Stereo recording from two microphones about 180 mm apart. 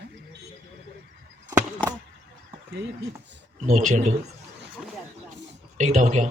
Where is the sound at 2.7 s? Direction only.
65° right (ahead or behind).